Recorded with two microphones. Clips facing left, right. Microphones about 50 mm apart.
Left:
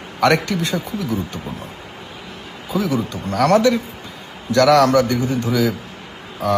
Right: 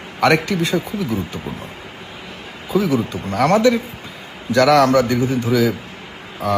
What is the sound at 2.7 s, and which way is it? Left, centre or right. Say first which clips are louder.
Speech: right 3 dB; centre.